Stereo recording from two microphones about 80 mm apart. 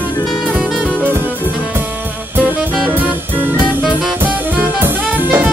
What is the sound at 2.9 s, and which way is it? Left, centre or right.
Music, right.